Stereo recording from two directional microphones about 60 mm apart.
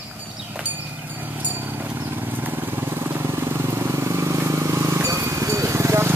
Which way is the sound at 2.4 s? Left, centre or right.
Right.